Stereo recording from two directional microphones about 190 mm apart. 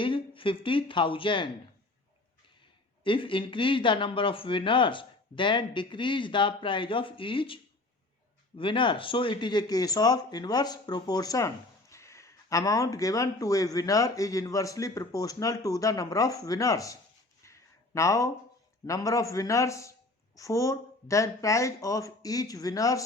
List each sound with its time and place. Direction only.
0.0 s speech: 25° left (ahead or behind)
3.0 s speech: 25° left (ahead or behind)
17.4 s a sound: 15° left (ahead or behind)
18.9 s speech: 15° left (ahead or behind)